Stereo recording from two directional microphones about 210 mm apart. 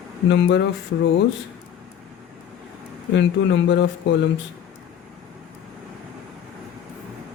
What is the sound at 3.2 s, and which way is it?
A man's voice, 55° left (ahead or behind).